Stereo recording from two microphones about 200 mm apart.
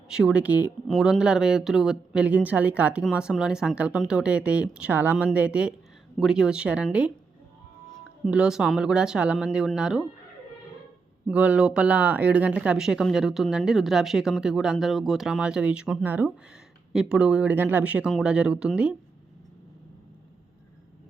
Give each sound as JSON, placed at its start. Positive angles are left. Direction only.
{"t": 0.1, "sound": "speech", "side_deg": -5}
{"t": 8.2, "sound": "speech", "side_deg": -5}
{"t": 11.3, "sound": "speech", "side_deg": -5}